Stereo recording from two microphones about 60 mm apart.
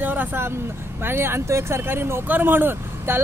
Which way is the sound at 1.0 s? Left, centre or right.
Right.